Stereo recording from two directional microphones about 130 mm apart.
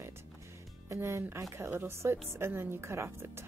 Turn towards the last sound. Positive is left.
turn(degrees=-20)  # may be behind; listen again after turning